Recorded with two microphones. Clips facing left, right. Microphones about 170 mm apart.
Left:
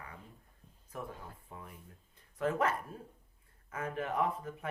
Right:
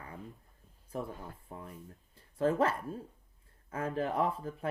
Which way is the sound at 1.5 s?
35° right (ahead or behind).